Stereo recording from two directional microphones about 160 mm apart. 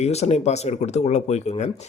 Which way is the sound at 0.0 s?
40° left (ahead or behind).